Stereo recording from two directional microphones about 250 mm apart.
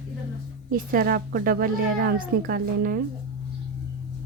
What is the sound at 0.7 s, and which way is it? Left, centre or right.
A woman's voice, right.